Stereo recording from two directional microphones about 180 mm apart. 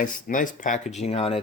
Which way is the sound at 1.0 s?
35° left (ahead or behind).